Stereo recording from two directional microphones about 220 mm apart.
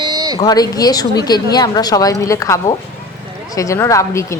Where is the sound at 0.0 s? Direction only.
20° right (ahead or behind).